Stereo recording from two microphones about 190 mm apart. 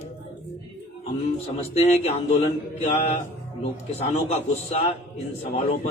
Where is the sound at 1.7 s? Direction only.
35° left (ahead or behind).